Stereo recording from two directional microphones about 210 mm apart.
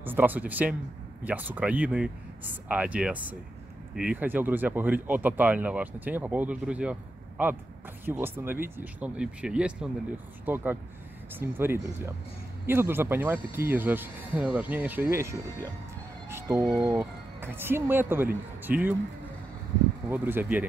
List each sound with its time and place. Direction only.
0.0 s speech: 10° right (ahead or behind)
20.1 s speech: 10° right (ahead or behind)